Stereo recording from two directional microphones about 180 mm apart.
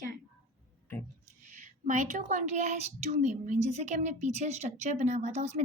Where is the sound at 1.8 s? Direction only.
45° right (ahead or behind).